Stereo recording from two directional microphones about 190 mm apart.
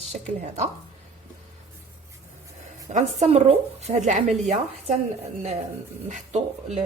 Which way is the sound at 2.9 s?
40° right (ahead or behind).